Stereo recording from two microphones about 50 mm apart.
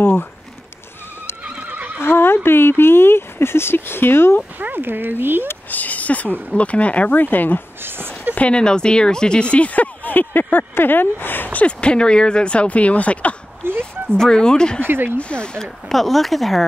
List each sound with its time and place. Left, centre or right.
0.0 s a sound: left
1.4 s neigh: right
2.0 s speech: left
4.6 s speech: right
5.7 s speech: left
7.8 s a sound: right
8.4 s speech: left
11.6 s speech: left
13.7 s a sound: right
14.1 s speech: centre
14.8 s speech: right
15.0 s speech: left
15.6 s speech: centre